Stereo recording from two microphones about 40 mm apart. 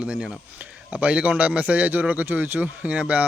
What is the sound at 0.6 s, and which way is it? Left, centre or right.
Speech, right.